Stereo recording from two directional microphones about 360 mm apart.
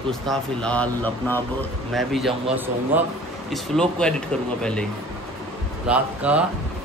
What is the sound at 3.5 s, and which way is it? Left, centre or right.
Speech, centre.